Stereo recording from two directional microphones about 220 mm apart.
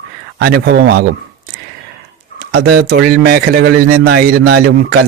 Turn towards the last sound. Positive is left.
turn(degrees=-45)  # may be behind; listen again after turning